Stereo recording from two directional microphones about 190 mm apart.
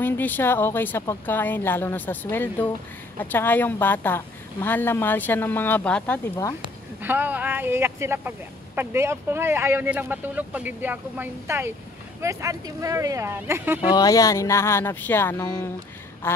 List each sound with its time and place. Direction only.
0.0 s speech: 10° left (ahead or behind)
7.0 s speech: 10° right (ahead or behind)
13.9 s speech: 20° left (ahead or behind)